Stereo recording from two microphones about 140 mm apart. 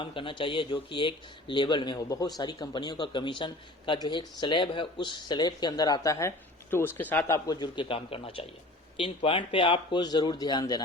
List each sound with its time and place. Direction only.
0.0 s a man's voice: 40° left (ahead or behind)